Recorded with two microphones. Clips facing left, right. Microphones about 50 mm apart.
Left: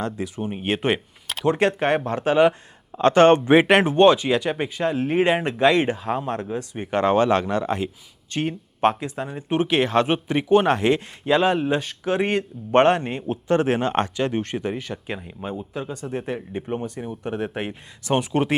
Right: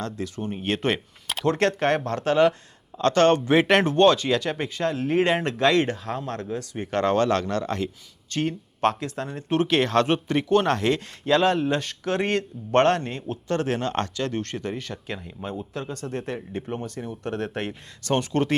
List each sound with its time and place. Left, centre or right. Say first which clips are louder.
0.0 s speech: left 3 dB; centre